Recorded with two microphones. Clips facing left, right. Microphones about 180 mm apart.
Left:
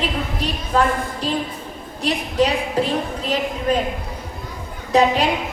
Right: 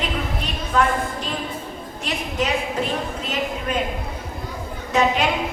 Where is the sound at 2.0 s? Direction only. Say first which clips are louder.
Left 6 dB; 35° left (ahead or behind).